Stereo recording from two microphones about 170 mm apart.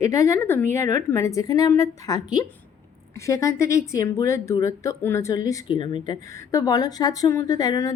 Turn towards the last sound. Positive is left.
turn(degrees=20)  # may be behind; listen again after turning